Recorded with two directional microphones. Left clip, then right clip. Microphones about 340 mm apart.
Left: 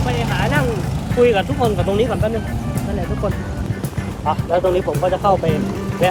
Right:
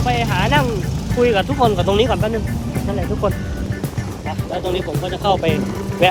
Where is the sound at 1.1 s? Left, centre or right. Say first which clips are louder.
Left 1 dB; centre.